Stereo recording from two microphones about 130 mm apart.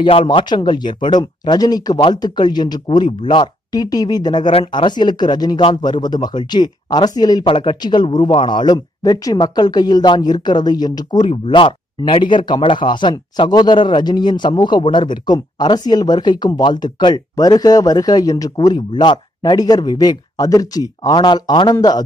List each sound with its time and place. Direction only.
0.0 s a man's voice: 40° left (ahead or behind)
7.4 s a man's voice: 40° left (ahead or behind)